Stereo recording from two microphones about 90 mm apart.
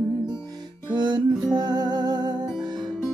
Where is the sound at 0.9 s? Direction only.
50° right (ahead or behind).